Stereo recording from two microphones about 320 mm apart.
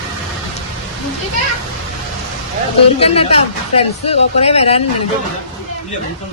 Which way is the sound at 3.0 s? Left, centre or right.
Centre.